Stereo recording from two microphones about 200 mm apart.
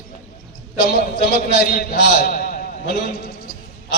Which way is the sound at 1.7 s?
45° left (ahead or behind).